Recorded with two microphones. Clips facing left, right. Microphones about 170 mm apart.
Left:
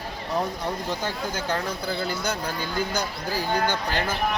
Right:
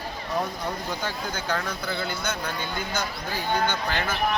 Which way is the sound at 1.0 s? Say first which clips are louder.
Left 2 dB; 30° left (ahead or behind).